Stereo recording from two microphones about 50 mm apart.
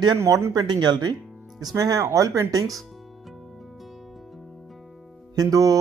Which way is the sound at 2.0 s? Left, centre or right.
Right.